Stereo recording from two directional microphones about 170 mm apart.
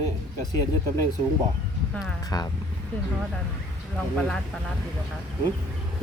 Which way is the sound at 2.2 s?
20° left (ahead or behind).